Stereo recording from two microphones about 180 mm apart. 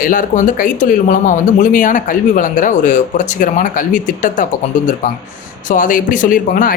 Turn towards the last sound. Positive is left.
turn(degrees=50)  # may be behind; listen again after turning